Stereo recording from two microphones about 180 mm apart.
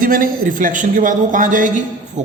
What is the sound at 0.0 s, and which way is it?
A man's voice, 50° right (ahead or behind).